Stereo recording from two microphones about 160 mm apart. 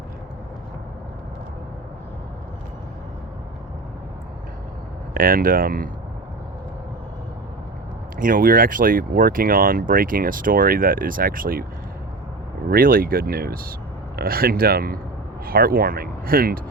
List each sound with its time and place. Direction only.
5.1 s speech: 60° right (ahead or behind)
8.2 s speech: 60° right (ahead or behind)
12.7 s speech: 65° right (ahead or behind)